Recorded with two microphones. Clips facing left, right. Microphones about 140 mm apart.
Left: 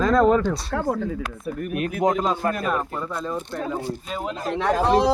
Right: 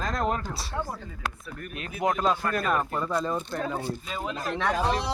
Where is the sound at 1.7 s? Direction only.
55° left (ahead or behind).